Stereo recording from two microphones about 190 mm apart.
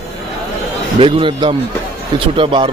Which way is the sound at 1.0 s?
25° right (ahead or behind).